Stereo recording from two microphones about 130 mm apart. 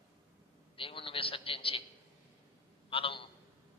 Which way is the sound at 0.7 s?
40° left (ahead or behind).